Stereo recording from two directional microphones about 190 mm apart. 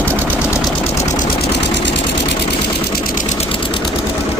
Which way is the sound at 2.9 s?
45° left (ahead or behind).